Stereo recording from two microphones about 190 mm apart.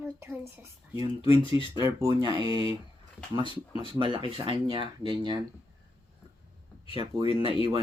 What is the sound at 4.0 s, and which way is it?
Speech, 25° right (ahead or behind).